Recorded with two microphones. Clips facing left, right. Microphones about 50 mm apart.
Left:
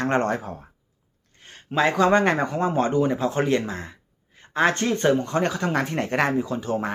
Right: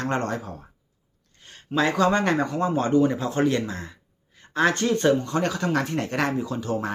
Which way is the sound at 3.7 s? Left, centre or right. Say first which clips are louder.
Left 2 dB; left.